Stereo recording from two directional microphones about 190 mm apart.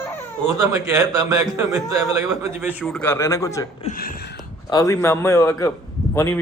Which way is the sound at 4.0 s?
50° left (ahead or behind).